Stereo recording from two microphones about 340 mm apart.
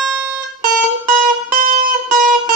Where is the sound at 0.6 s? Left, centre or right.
Right.